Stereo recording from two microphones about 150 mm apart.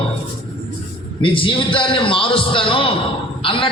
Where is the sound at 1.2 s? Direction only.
35° left (ahead or behind).